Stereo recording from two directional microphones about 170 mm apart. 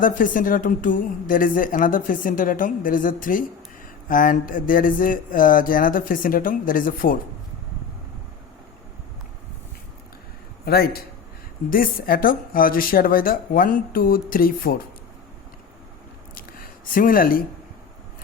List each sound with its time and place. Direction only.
0.0 s a woman's voice: 55° left (ahead or behind)
10.7 s a woman's voice: 65° left (ahead or behind)
16.9 s a woman's voice: 55° left (ahead or behind)